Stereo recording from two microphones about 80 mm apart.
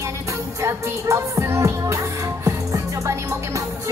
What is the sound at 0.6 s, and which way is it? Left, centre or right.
Music, right.